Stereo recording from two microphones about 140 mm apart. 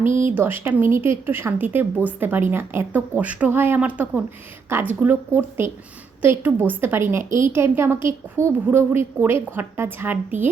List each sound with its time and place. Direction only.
0.0 s speech: 65° right (ahead or behind)
0.3 s a woman's voice: 15° right (ahead or behind)